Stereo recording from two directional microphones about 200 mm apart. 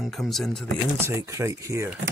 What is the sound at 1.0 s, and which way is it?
Speech, 15° right (ahead or behind).